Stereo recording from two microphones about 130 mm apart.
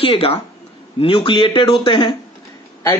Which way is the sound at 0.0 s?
45° left (ahead or behind).